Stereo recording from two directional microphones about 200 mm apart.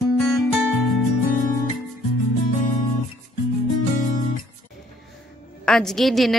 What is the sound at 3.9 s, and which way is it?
Music, 40° left (ahead or behind).